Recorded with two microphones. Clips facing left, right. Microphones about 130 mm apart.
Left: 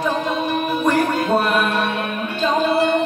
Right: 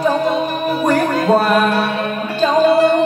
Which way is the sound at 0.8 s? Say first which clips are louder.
Right 4 dB; 40° right (ahead or behind).